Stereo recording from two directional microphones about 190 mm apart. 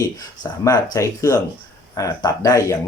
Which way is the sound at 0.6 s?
15° left (ahead or behind).